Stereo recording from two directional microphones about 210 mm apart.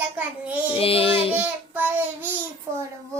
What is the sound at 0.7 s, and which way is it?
Speech, 25° left (ahead or behind).